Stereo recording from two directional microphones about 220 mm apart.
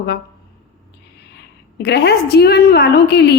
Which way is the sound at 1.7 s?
50° left (ahead or behind).